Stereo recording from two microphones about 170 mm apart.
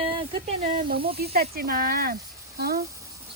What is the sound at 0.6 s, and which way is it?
Speech, 50° right (ahead or behind).